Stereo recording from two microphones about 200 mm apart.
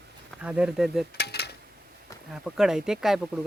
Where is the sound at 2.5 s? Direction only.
Centre (ahead or behind).